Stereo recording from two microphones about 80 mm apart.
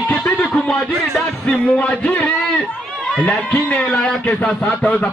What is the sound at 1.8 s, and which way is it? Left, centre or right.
Speech, centre.